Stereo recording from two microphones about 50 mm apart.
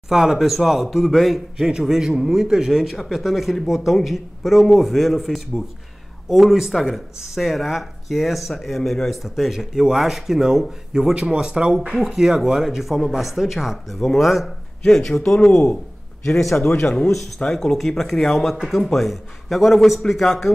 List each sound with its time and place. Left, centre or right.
0.1 s speech: centre